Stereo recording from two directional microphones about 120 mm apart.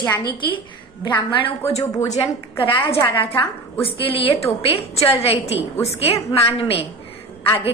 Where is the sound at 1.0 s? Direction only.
40° left (ahead or behind).